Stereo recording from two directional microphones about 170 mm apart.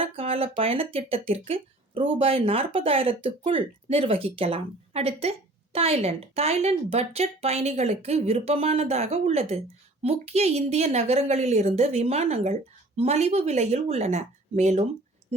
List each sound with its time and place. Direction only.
0.0 s speech: 35° right (ahead or behind)